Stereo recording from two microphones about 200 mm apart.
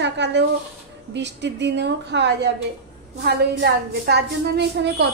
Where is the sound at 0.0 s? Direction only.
60° right (ahead or behind).